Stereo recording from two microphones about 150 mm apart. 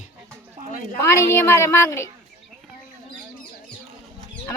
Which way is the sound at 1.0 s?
20° left (ahead or behind).